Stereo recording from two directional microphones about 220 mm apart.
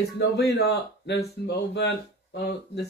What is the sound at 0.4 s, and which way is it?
Speech, 50° left (ahead or behind).